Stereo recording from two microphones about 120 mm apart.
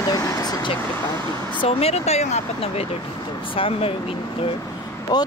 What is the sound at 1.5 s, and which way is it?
Speech, 50° left (ahead or behind).